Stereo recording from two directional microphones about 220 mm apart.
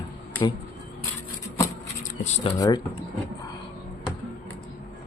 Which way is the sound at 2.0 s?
30° left (ahead or behind).